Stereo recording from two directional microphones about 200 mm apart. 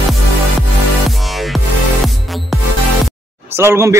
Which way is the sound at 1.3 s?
Centre (ahead or behind).